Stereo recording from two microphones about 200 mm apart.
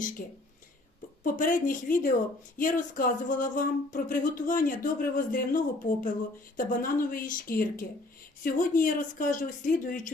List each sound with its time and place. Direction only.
0.0 s speech: 40° left (ahead or behind)